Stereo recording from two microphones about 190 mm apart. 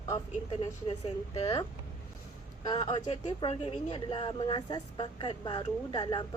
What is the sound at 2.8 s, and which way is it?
A woman's voice, 25° left (ahead or behind).